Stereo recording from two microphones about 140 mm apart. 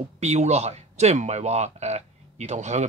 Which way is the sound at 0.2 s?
50° right (ahead or behind).